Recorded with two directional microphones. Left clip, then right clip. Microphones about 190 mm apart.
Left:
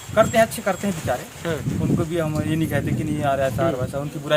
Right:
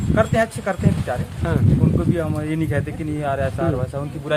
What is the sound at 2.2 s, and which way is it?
Speech, 5° right (ahead or behind).